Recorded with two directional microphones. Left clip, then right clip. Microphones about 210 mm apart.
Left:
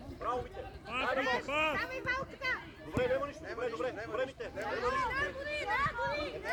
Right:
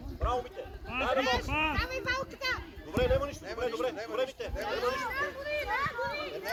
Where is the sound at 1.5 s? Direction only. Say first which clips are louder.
Right 1 dB; 50° left (ahead or behind).